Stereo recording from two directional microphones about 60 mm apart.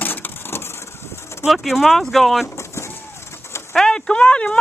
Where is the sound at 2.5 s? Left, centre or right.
Left.